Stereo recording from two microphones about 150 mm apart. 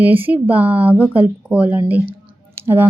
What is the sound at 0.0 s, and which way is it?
Speech, 10° right (ahead or behind).